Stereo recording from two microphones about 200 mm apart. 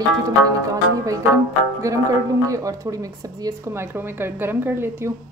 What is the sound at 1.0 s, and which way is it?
Speech, 15° right (ahead or behind).